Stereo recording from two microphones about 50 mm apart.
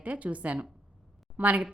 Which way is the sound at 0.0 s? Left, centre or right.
Right.